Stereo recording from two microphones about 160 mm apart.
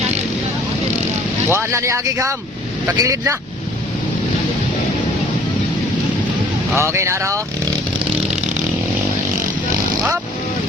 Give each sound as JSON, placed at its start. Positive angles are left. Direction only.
{"t": 1.5, "sound": "speech", "side_deg": -15}
{"t": 6.7, "sound": "speech", "side_deg": -15}